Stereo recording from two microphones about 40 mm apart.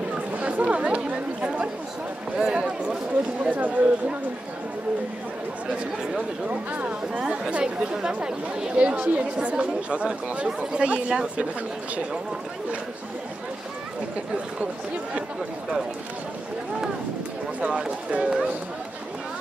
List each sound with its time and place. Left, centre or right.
0.1 s chatter: right
2.4 s speech: right
3.4 s speech: right
6.5 s speech: right
7.2 s speech: right
8.7 s speech: right
17.6 s speech: right